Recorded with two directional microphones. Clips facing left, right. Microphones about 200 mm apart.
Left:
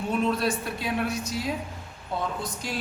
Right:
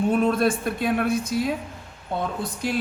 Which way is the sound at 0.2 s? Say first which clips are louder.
Right 5 dB; 50° right (ahead or behind).